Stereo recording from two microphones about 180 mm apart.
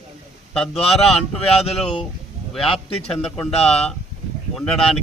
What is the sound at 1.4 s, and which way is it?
Speech, 35° left (ahead or behind).